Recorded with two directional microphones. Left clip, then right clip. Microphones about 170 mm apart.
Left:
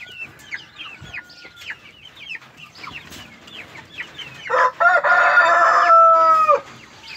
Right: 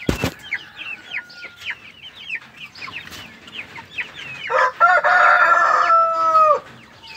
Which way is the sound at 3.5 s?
40° left (ahead or behind).